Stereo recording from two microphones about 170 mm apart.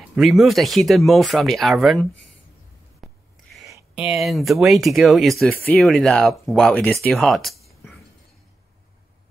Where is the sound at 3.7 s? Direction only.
15° right (ahead or behind).